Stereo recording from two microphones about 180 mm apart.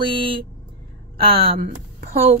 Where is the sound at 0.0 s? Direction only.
30° right (ahead or behind).